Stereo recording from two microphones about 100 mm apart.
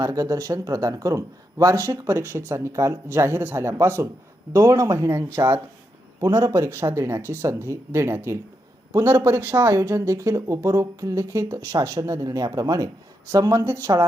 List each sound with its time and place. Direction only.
0.0 s a woman's voice: 35° right (ahead or behind)